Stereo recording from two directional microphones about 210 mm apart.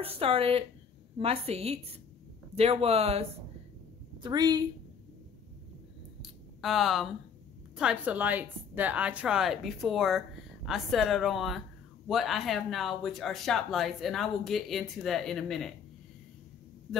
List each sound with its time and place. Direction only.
0.0 s a woman's voice: 25° right (ahead or behind)
6.2 s a sound: centre (ahead or behind)
7.7 s a woman's voice: 5° right (ahead or behind)